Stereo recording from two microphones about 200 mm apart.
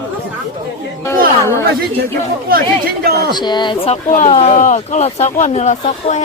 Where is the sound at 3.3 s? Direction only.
20° left (ahead or behind).